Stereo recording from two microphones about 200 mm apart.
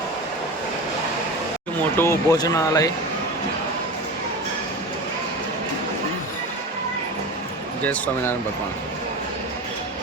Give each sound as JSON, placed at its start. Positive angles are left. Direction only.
{"t": 2.0, "sound": "speech", "side_deg": 15}
{"t": 7.9, "sound": "speech", "side_deg": 10}